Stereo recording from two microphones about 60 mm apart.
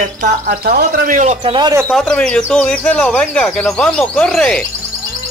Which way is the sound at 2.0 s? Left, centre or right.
Centre.